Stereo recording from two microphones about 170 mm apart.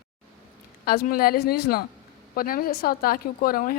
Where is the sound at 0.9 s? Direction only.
60° left (ahead or behind).